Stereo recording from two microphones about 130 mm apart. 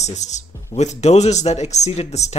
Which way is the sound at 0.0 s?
65° left (ahead or behind).